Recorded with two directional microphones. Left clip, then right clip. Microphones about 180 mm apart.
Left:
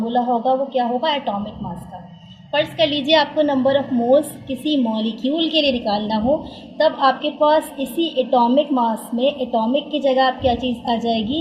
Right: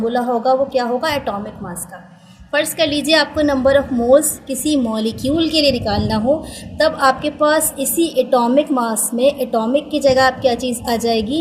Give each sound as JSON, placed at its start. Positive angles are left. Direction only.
{"t": 0.1, "sound": "a woman's voice", "side_deg": -35}
{"t": 2.5, "sound": "a woman's voice", "side_deg": -35}